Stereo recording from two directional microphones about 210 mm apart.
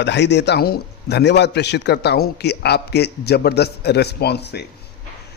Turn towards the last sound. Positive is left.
turn(degrees=50)  # may be behind; listen again after turning